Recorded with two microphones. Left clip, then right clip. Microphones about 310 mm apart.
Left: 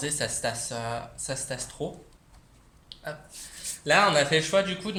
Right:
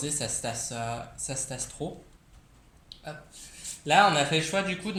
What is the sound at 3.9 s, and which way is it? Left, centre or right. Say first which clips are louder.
Speech: even; left.